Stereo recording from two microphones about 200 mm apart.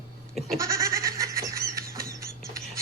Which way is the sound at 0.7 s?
15° right (ahead or behind).